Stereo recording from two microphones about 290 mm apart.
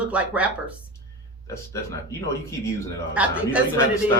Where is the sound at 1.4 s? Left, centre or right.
Centre.